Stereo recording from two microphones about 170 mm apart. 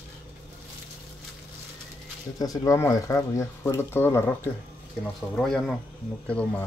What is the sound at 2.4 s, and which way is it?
Speech, 20° left (ahead or behind).